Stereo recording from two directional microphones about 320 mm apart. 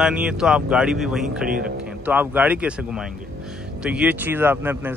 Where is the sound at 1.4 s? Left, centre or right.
Right.